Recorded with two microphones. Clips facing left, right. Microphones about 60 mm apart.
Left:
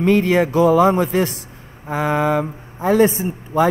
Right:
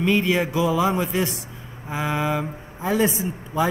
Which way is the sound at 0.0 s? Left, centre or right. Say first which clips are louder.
Left 5 dB; left.